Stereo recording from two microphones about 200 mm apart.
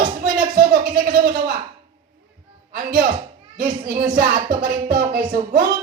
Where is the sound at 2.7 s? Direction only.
45° right (ahead or behind).